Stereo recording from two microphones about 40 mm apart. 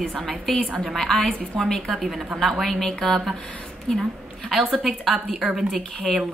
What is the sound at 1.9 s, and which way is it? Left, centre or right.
A woman's voice, centre.